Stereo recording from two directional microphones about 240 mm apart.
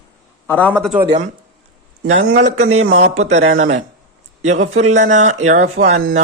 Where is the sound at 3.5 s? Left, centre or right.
Right.